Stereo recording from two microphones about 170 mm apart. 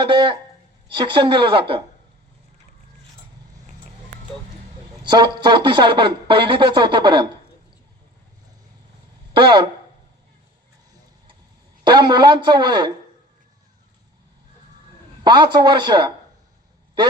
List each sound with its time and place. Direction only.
0.0 s speech: 30° right (ahead or behind)
5.0 s speech: 25° right (ahead or behind)
9.3 s speech: 25° right (ahead or behind)
11.9 s speech: 25° right (ahead or behind)
15.2 s speech: 25° right (ahead or behind)